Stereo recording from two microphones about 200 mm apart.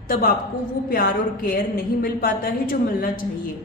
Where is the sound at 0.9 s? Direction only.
45° left (ahead or behind).